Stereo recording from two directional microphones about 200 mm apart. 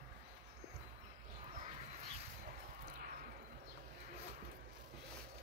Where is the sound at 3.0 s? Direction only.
45° right (ahead or behind).